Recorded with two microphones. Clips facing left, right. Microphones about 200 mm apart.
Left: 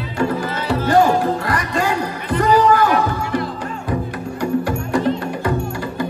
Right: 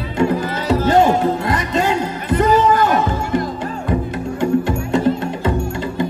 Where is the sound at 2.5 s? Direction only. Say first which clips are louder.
Even; 25° right (ahead or behind).